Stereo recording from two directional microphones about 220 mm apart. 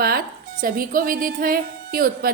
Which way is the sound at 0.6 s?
40° right (ahead or behind).